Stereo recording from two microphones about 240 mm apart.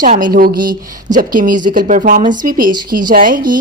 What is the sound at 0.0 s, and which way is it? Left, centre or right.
A woman's voice, right.